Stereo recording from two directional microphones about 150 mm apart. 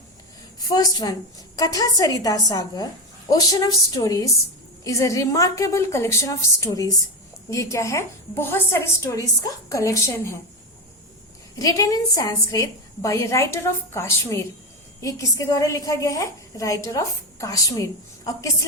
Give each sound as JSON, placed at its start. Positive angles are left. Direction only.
{"t": 0.7, "sound": "a woman's voice", "side_deg": 25}
{"t": 11.6, "sound": "a woman's voice", "side_deg": 25}